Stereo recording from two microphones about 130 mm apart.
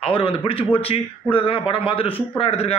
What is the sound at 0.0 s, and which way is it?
A man's voice, 45° left (ahead or behind).